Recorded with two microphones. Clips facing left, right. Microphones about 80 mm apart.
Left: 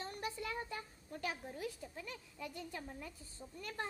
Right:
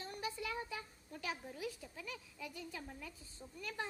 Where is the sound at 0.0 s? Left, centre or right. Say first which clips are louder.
Left 1 dB; left.